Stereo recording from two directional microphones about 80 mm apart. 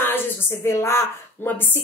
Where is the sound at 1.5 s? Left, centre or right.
Left.